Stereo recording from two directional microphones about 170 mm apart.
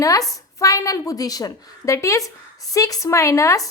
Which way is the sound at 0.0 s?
20° left (ahead or behind).